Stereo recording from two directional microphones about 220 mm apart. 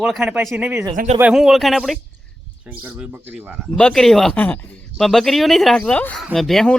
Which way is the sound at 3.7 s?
5° left (ahead or behind).